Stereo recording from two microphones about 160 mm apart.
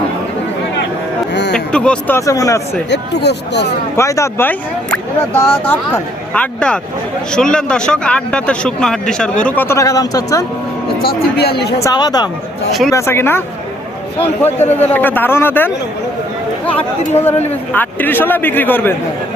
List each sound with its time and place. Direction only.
1.3 s music: 90° left
1.5 s speech: 5° left (ahead or behind)
2.9 s speech: 90° left
3.9 s speech: 20° left (ahead or behind)
11.0 s speech: 90° left
11.8 s speech: 25° left (ahead or behind)
14.8 s speech: 10° left (ahead or behind)
17.2 s speech: 10° left (ahead or behind)